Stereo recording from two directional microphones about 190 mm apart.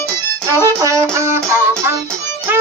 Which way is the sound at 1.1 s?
15° right (ahead or behind).